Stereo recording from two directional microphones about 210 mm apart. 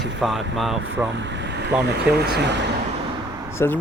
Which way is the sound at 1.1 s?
55° right (ahead or behind).